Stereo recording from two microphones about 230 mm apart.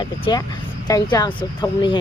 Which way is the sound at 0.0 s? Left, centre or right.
Centre.